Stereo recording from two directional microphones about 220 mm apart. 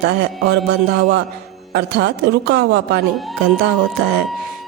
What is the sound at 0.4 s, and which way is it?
A woman's voice, 50° right (ahead or behind).